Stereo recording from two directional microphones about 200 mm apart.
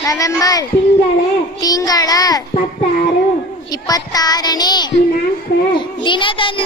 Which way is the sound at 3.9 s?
20° left (ahead or behind).